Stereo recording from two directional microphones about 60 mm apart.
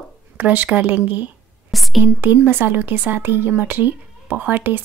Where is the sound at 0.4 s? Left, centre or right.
Right.